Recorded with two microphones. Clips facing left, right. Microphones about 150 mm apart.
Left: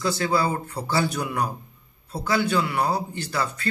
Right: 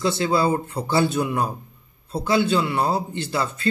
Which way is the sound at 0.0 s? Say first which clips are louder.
Right 3 dB; 25° right (ahead or behind).